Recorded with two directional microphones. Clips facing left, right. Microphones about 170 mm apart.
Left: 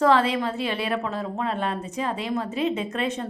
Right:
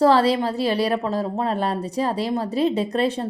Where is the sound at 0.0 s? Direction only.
35° right (ahead or behind).